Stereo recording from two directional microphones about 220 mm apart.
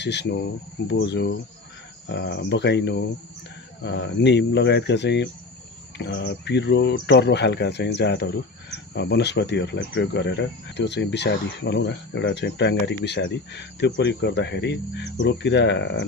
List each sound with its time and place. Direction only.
0.0 s speech: 50° left (ahead or behind)